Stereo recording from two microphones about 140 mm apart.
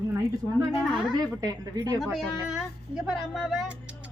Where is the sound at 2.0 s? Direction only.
Centre (ahead or behind).